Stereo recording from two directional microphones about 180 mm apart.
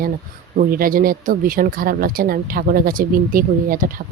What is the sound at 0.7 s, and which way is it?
Speech, 50° right (ahead or behind).